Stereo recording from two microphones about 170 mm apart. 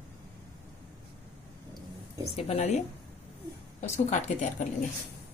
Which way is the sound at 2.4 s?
35° left (ahead or behind).